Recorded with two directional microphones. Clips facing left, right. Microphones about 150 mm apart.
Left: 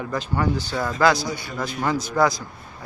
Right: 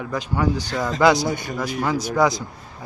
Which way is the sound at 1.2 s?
50° right (ahead or behind).